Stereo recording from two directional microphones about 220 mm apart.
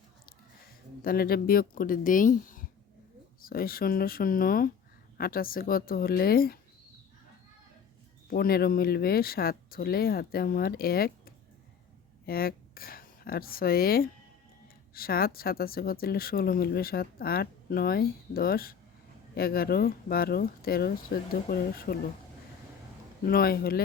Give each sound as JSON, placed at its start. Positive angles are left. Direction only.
{"t": 1.0, "sound": "speech", "side_deg": 45}
{"t": 8.3, "sound": "speech", "side_deg": 45}
{"t": 23.2, "sound": "speech", "side_deg": 45}